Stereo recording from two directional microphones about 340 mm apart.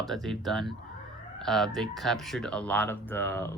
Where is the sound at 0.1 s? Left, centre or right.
Centre.